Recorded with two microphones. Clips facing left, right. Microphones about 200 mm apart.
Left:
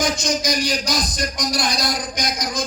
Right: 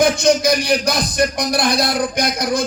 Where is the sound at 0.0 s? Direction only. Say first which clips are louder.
Right 8 dB; 60° right (ahead or behind).